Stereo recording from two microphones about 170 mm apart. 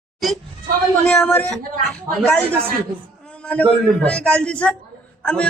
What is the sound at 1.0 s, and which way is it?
A man's voice, 5° left (ahead or behind).